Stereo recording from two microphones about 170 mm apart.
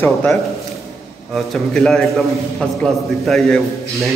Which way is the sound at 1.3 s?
Centre (ahead or behind).